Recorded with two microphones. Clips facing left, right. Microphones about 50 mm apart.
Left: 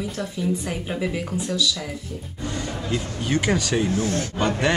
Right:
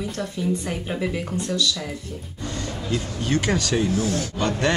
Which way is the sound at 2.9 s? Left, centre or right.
Centre.